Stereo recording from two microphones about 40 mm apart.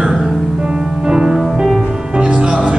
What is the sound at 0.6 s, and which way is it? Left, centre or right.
Music, centre.